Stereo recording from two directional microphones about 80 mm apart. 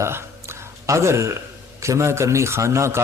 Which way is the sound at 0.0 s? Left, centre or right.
Right.